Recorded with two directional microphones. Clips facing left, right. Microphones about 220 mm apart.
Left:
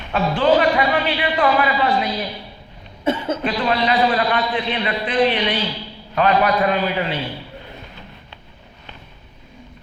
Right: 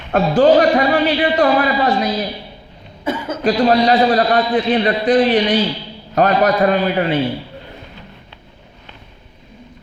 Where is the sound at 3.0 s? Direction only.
25° left (ahead or behind).